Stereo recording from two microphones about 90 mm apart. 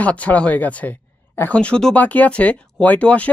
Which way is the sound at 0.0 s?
15° left (ahead or behind).